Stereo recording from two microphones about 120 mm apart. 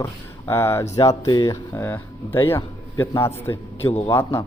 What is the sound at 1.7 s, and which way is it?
A man's voice, 20° left (ahead or behind).